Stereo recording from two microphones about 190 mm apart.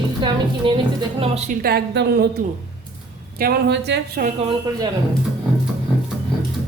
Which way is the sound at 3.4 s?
55° right (ahead or behind).